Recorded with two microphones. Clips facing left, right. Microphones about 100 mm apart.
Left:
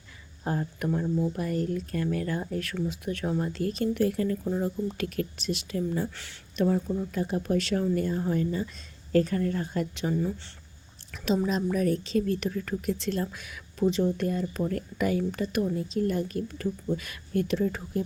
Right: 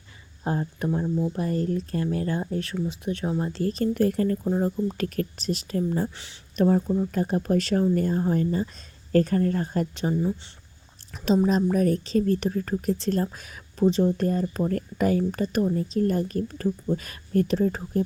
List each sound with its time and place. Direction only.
0.4 s speech: 25° right (ahead or behind); by 4.4 s 45° right (ahead or behind)
4.4 s speech: 30° right (ahead or behind)
10.1 s speech: 20° right (ahead or behind)
11.4 s speech: 40° right (ahead or behind)